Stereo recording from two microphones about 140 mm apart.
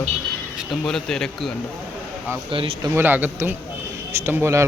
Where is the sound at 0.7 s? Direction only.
5° left (ahead or behind).